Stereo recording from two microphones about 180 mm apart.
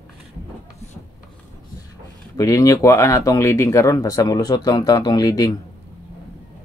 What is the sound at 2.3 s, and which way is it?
Speech, 20° left (ahead or behind).